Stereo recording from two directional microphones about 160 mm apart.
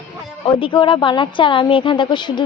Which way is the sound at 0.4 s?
30° left (ahead or behind).